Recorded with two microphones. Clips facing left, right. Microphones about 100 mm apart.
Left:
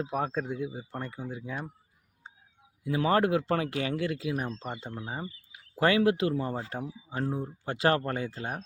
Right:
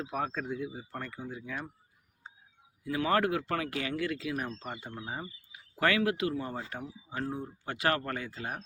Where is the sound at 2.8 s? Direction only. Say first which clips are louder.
Left 3 dB; 25° left (ahead or behind).